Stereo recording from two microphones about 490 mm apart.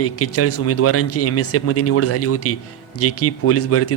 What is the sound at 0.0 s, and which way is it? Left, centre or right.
Speech, left.